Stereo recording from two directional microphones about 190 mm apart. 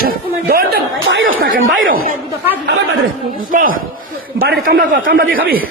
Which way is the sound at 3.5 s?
45° right (ahead or behind).